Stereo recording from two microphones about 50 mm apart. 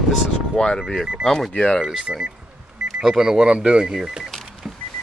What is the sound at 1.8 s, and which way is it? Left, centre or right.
Speech, centre.